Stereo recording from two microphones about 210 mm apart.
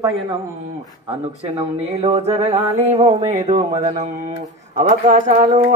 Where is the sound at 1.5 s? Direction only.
30° right (ahead or behind).